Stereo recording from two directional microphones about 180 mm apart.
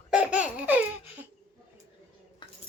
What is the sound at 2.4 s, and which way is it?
Cutlery, 25° left (ahead or behind).